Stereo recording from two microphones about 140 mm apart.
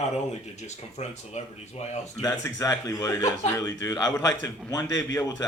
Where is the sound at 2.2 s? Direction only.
25° left (ahead or behind).